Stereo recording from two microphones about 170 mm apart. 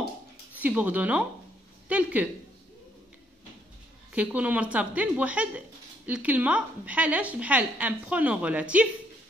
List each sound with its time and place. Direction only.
0.5 s a woman's voice: 10° right (ahead or behind)
4.1 s a woman's voice: 10° right (ahead or behind)